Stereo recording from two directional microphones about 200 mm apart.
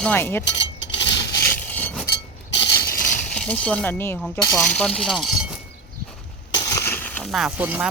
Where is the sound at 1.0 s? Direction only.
20° left (ahead or behind).